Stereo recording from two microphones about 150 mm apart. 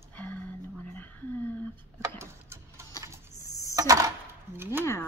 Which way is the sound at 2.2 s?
20° right (ahead or behind).